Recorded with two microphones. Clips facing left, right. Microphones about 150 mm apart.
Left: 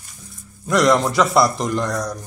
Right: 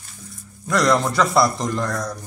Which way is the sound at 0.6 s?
Centre (ahead or behind).